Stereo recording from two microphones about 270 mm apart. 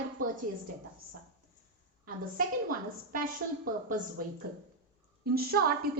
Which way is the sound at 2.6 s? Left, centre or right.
Right.